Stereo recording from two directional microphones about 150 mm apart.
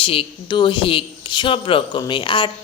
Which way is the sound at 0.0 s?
40° left (ahead or behind).